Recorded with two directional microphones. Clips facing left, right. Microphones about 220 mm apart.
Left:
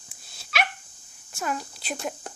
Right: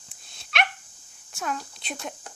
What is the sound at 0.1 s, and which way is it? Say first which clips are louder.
Dog: left 1 dB; centre (ahead or behind).